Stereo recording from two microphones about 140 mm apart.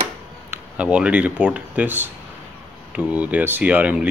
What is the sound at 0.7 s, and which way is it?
Speech, 10° right (ahead or behind).